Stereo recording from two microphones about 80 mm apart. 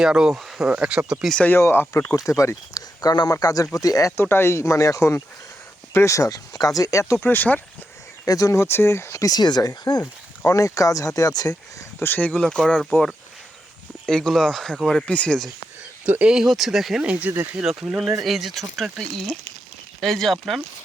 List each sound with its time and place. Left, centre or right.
0.0 s speech: centre
1.5 s speech: left
4.2 s speech: left
8.2 s speech: left
10.4 s speech: left
11.9 s speech: left
12.4 s speech: centre
14.1 s speech: centre
16.0 s speech: right
16.3 s speech: centre
17.0 s speech: centre
17.6 s speech: centre